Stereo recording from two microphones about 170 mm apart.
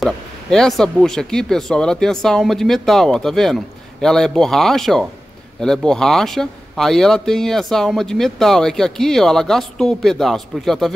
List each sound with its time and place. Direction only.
0.0 s a man's voice: 5° left (ahead or behind)